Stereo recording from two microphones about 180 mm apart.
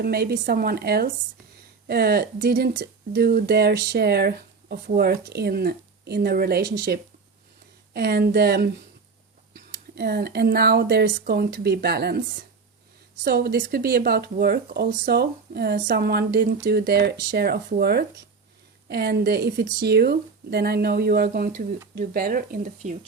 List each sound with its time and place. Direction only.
0.0 s speech: 60° right (ahead or behind); by 23.0 s 45° right (ahead or behind)